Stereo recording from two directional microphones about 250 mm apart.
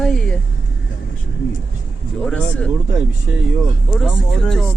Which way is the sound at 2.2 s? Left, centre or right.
Centre.